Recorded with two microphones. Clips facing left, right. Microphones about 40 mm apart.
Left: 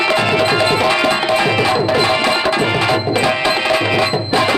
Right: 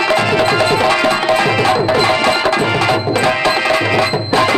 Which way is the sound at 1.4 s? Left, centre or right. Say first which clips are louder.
Right 1 dB; centre.